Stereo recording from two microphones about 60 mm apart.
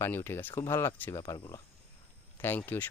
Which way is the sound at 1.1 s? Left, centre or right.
Left.